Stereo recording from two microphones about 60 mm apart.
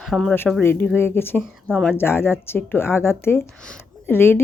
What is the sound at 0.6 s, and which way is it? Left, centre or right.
A woman's voice, left.